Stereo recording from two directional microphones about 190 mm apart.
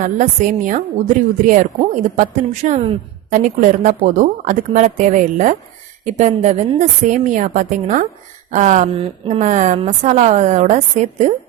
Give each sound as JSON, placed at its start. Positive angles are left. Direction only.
{"t": 0.0, "sound": "a woman's voice", "side_deg": -45}